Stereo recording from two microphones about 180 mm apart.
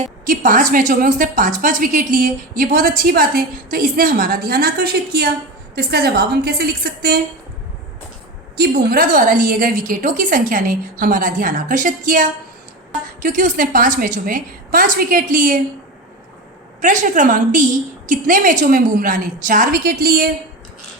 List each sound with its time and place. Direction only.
0.3 s a woman's voice: 50° right (ahead or behind)
8.5 s a woman's voice: 60° right (ahead or behind)
16.8 s a woman's voice: 45° right (ahead or behind)